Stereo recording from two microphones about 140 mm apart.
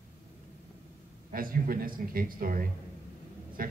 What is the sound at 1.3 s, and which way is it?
Speech, 90° right.